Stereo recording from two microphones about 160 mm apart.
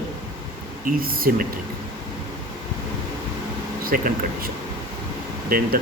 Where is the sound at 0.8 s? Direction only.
65° right (ahead or behind).